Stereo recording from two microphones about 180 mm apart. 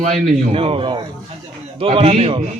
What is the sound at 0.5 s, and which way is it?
A man's voice, 30° right (ahead or behind).